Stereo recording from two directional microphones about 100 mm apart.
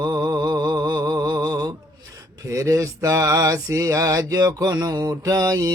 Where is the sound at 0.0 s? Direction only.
40° right (ahead or behind).